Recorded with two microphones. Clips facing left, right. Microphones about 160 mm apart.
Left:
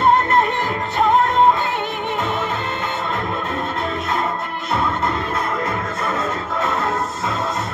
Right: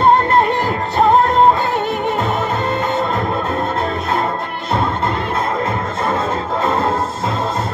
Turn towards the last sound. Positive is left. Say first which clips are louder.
# right 4 dB
turn(degrees=-30)  # may be behind; listen again after turning